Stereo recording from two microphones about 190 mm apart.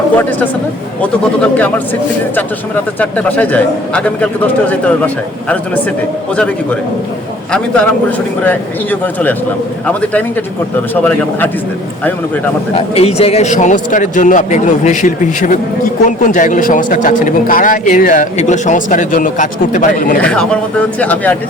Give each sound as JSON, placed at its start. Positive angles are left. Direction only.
{"t": 0.2, "sound": "a man's voice", "side_deg": 10}
{"t": 3.0, "sound": "a man's voice", "side_deg": 10}
{"t": 7.5, "sound": "a man's voice", "side_deg": 5}
{"t": 12.7, "sound": "a man's voice", "side_deg": 30}
{"t": 20.2, "sound": "a man's voice", "side_deg": 5}